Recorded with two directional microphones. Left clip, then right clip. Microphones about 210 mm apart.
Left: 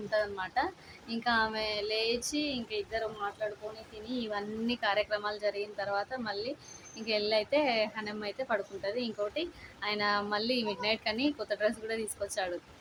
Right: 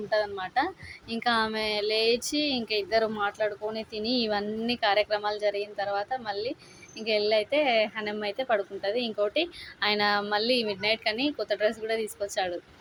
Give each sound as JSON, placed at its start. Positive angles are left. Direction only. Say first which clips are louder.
{"t": 0.1, "sound": "a woman's voice", "louder": "right 4 dB", "side_deg": -20}